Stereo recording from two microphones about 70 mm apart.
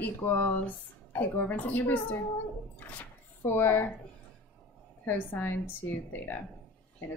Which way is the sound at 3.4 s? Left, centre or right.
Left.